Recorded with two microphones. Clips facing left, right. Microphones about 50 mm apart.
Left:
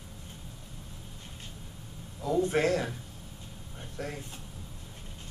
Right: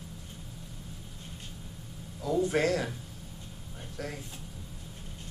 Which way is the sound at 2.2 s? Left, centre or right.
Left.